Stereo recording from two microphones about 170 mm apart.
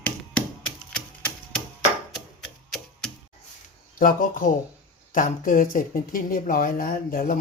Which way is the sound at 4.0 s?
55° left (ahead or behind).